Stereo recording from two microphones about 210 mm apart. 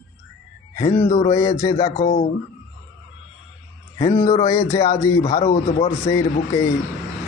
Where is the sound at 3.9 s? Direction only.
15° left (ahead or behind).